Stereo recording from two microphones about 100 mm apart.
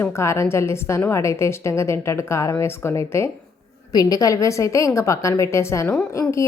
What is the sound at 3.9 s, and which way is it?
A woman's voice, 40° left (ahead or behind).